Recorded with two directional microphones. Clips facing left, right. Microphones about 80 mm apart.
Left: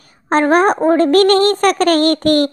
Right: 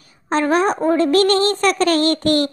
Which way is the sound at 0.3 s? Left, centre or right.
Left.